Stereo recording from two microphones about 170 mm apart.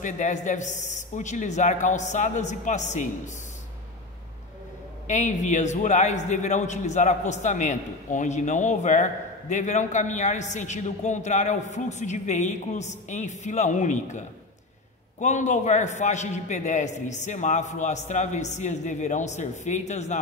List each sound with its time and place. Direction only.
0.0 s a man's voice: 45° left (ahead or behind)
5.0 s a man's voice: 45° left (ahead or behind)